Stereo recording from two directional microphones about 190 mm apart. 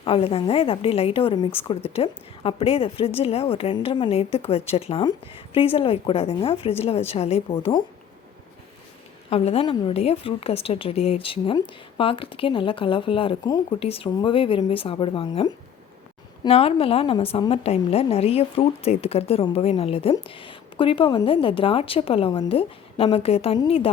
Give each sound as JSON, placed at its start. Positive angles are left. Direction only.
{"t": 0.0, "sound": "a woman's voice", "side_deg": 30}
{"t": 9.3, "sound": "a woman's voice", "side_deg": 30}